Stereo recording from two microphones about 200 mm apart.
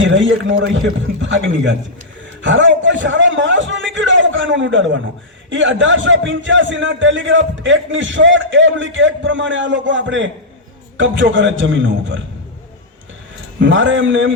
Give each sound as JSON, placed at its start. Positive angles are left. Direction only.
{"t": 0.0, "sound": "a man's voice", "side_deg": -75}
{"t": 2.4, "sound": "a man's voice", "side_deg": -70}
{"t": 13.6, "sound": "a man's voice", "side_deg": -65}